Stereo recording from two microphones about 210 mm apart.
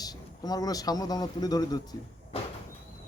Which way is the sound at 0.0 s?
20° left (ahead or behind).